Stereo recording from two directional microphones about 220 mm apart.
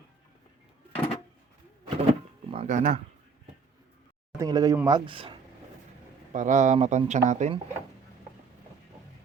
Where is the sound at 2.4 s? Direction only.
30° right (ahead or behind).